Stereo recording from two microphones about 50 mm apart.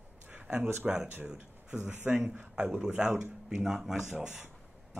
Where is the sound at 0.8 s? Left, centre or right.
Right.